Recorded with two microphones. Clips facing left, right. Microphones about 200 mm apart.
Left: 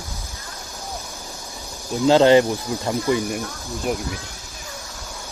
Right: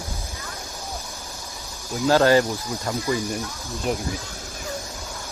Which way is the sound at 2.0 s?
20° left (ahead or behind).